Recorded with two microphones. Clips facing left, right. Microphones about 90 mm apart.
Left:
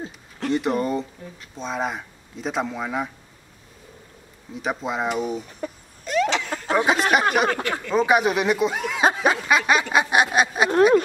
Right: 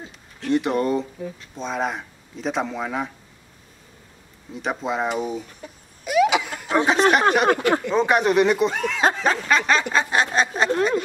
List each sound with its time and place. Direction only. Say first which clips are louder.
0.5 s speech: right 2 dB; centre (ahead or behind)
4.6 s speech: right 1 dB; centre (ahead or behind)
6.0 s a sound: right 3 dB; 10° right (ahead or behind)
6.7 s speech: right 2 dB; 5° left (ahead or behind)
7.6 s speech: right 7 dB; 20° right (ahead or behind)
7.9 s speech: left 2 dB; 5° left (ahead or behind)